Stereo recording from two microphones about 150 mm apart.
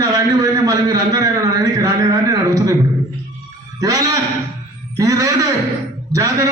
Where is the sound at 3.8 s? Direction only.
25° right (ahead or behind).